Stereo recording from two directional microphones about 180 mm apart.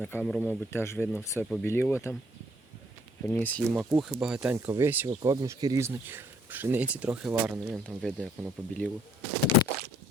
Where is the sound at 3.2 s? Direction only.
10° left (ahead or behind).